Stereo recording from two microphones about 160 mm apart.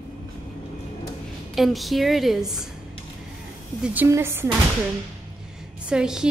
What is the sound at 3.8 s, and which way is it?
Speech, 10° right (ahead or behind).